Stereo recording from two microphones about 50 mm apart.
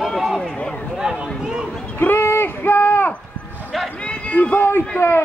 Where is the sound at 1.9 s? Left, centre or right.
Left.